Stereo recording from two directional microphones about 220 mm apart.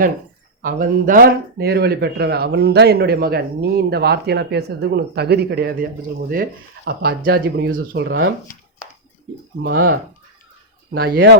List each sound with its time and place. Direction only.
0.6 s speech: 40° right (ahead or behind); by 8.3 s 55° right (ahead or behind)
9.6 s speech: 40° right (ahead or behind)